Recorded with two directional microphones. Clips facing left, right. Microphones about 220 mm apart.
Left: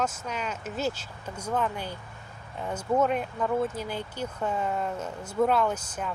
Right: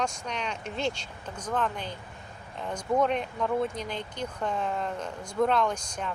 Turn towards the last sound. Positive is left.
turn(degrees=5)  # may be behind; listen again after turning